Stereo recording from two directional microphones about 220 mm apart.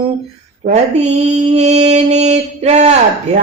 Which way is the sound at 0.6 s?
30° right (ahead or behind).